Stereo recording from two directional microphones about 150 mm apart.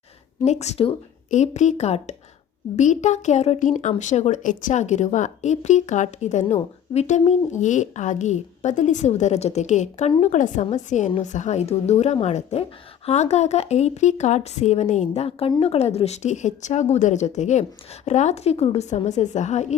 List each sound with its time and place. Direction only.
0.4 s speech: 50° left (ahead or behind)